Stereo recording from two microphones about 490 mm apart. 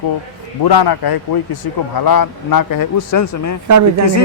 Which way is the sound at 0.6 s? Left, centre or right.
Left.